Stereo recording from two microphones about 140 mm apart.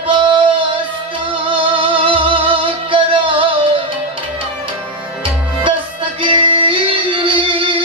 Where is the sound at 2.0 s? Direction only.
40° right (ahead or behind).